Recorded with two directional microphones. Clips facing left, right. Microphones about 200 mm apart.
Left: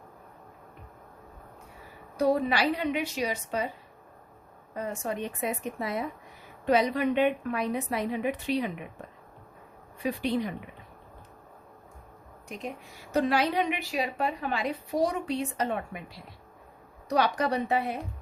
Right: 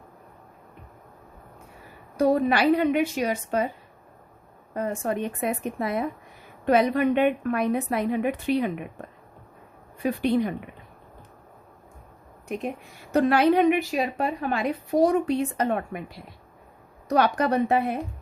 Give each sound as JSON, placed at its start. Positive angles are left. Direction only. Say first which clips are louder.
{"t": 2.1, "sound": "a woman's voice", "louder": "right 4 dB", "side_deg": -50}
{"t": 4.7, "sound": "a woman's voice", "louder": "right 5 dB", "side_deg": -55}
{"t": 10.0, "sound": "a woman's voice", "louder": "right 5 dB", "side_deg": -55}
{"t": 12.5, "sound": "a woman's voice", "louder": "right 7 dB", "side_deg": -60}